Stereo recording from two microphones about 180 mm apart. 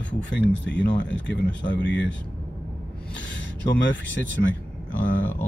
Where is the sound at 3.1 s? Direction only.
80° left.